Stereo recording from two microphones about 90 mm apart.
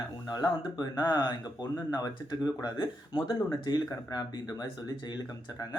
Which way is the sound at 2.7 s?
60° left (ahead or behind).